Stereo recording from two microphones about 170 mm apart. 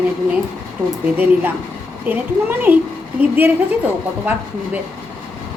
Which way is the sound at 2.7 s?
10° right (ahead or behind).